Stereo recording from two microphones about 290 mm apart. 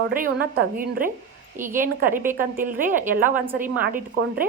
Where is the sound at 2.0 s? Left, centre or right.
Right.